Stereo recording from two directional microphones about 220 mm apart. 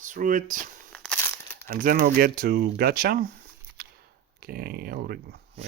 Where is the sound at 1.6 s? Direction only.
40° right (ahead or behind).